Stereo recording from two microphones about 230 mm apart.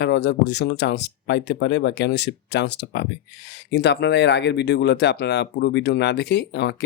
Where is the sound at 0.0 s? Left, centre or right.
Left.